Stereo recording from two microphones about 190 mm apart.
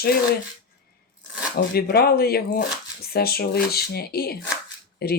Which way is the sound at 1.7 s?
55° left (ahead or behind).